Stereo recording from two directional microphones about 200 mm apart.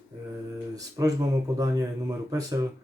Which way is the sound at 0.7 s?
15° right (ahead or behind).